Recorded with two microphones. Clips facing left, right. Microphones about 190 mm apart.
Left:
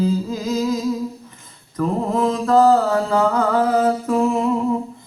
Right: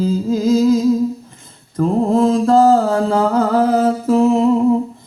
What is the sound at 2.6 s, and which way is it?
Music, 35° right (ahead or behind).